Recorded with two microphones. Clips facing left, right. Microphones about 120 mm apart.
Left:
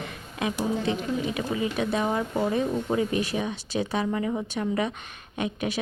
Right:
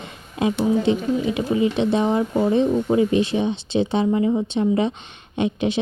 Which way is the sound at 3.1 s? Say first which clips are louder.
Right 7 dB; 25° right (ahead or behind).